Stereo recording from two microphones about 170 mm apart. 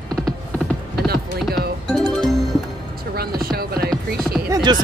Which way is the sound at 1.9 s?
Centre (ahead or behind).